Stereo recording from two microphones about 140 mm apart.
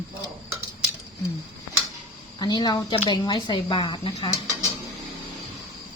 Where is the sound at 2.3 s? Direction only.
30° left (ahead or behind).